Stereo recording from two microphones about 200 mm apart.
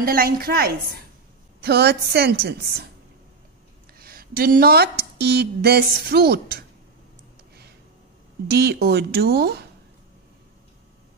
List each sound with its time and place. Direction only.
0.0 s speech: 45° right (ahead or behind)
4.0 s speech: 50° right (ahead or behind)
8.5 s speech: 55° right (ahead or behind)